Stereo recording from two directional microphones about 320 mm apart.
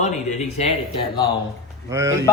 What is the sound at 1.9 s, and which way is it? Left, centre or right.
Speech, centre.